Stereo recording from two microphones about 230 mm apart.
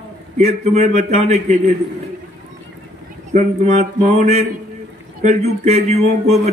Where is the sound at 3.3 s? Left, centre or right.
Right.